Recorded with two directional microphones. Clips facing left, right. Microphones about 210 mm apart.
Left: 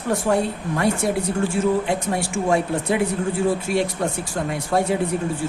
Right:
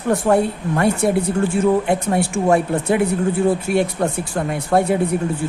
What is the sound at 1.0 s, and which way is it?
A woman's voice, 55° right (ahead or behind).